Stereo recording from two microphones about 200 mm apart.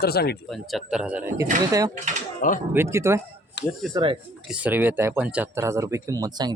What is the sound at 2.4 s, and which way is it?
Speech, 45° left (ahead or behind).